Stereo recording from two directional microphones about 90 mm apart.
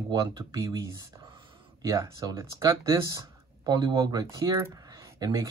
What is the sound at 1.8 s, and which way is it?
Speech, 45° right (ahead or behind).